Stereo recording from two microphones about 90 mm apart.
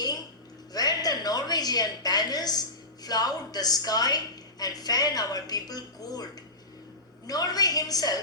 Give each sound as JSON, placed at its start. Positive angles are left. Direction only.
{"t": 0.7, "sound": "a sound", "side_deg": 45}
{"t": 4.6, "sound": "a woman's voice", "side_deg": 45}
{"t": 7.3, "sound": "a woman's voice", "side_deg": 45}